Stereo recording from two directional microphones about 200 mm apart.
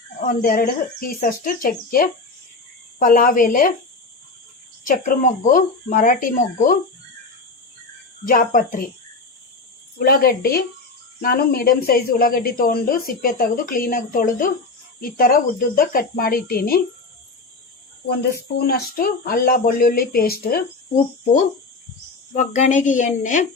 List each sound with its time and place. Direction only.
0.2 s speech: 45° left (ahead or behind)
4.8 s speech: 40° left (ahead or behind)
8.2 s speech: 45° left (ahead or behind)
10.0 s speech: 50° left (ahead or behind)
18.1 s speech: 55° left (ahead or behind)
22.3 s a woman's voice: 35° left (ahead or behind)